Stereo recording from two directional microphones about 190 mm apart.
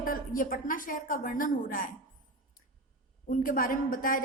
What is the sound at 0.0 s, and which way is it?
A woman's voice, 45° left (ahead or behind).